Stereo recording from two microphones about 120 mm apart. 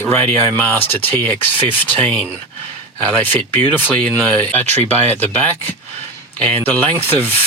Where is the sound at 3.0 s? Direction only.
15° left (ahead or behind).